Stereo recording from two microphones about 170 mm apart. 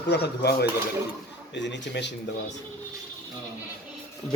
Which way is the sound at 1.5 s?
90° left.